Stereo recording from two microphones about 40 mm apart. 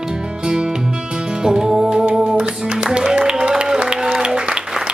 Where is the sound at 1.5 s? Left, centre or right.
Centre.